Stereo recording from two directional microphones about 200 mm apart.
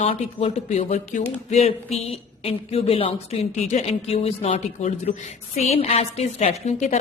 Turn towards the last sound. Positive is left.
turn(degrees=35)  # may be behind; listen again after turning